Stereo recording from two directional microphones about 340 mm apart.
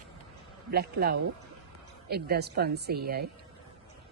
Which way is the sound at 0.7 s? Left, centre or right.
Right.